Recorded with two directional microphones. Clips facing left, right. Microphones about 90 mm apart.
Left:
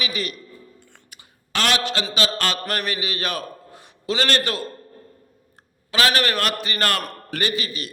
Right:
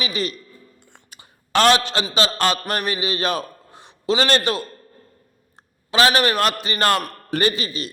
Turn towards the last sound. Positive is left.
turn(degrees=-30)  # may be behind; listen again after turning